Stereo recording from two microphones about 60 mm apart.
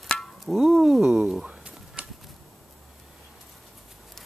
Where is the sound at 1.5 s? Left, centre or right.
Centre.